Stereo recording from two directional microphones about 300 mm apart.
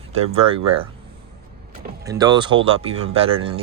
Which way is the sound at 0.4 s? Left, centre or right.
Centre.